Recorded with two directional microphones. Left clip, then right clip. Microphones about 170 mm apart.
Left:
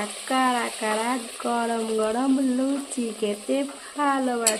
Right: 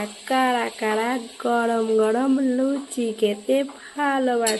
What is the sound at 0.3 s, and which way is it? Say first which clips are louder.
Speech: right 2 dB; 5° right (ahead or behind).